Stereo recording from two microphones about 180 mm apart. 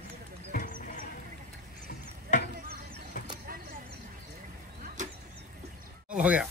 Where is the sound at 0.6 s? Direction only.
45° left (ahead or behind).